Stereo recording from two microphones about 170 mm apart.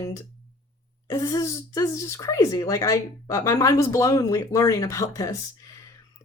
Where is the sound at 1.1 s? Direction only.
20° left (ahead or behind).